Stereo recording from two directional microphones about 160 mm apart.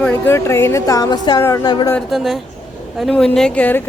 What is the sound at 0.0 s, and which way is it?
A woman's voice, 15° left (ahead or behind).